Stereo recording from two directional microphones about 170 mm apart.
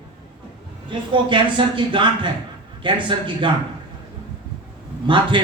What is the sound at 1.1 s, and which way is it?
A man's voice, 30° right (ahead or behind).